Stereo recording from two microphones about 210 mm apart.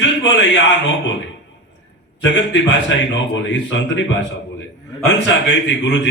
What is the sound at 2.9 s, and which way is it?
A man's voice, 60° left (ahead or behind).